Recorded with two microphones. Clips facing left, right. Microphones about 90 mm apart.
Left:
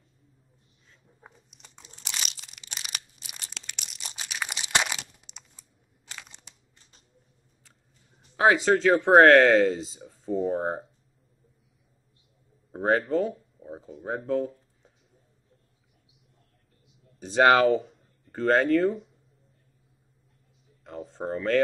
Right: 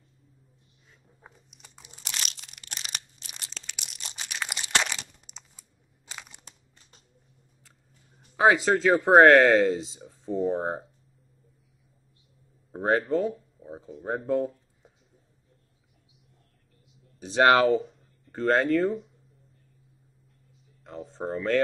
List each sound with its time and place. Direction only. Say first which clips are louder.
1.2 s biting: even; centre (ahead or behind)
1.8 s crunch: even; 10° right (ahead or behind)
2.0 s crunch: even; centre (ahead or behind)
3.7 s crushing: even; 5° right (ahead or behind)
4.7 s crunch: left 1 dB; 15° left (ahead or behind)
5.6 s crunch: even; 15° right (ahead or behind)
6.5 s crumpling: right 3 dB; 40° right (ahead or behind)
8.4 s speech: even; centre (ahead or behind)
12.7 s speech: even; centre (ahead or behind)
17.3 s speech: even; centre (ahead or behind)
20.8 s speech: even; centre (ahead or behind)